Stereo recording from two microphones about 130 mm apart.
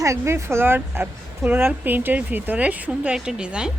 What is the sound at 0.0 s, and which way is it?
A woman's voice, 25° right (ahead or behind).